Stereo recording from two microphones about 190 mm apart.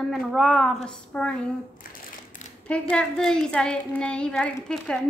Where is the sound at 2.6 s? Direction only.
5° left (ahead or behind).